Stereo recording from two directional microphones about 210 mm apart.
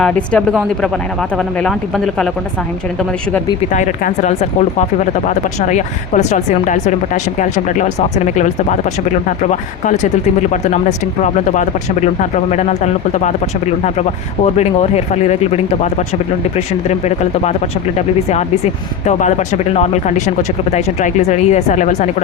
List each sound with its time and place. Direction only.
0.0 s speech: 5° left (ahead or behind)
3.7 s speech: 35° left (ahead or behind)